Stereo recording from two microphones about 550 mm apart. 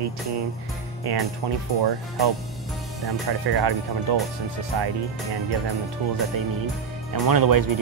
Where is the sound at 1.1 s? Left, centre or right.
Right.